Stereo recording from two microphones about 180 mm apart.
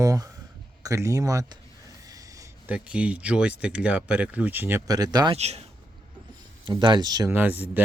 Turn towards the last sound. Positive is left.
turn(degrees=-10)  # may be behind; listen again after turning